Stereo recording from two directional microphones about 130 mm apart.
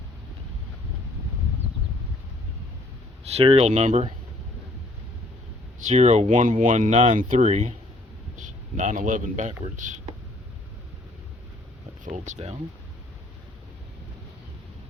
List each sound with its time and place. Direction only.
3.2 s speech: 50° right (ahead or behind)
5.9 s speech: 60° right (ahead or behind)
8.4 s a man's voice: 75° right (ahead or behind)
12.0 s speech: 70° right (ahead or behind)